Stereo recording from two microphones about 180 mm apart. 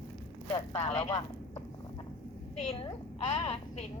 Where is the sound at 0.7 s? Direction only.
35° left (ahead or behind).